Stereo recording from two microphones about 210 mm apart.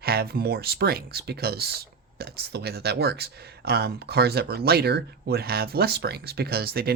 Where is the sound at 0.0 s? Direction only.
45° right (ahead or behind).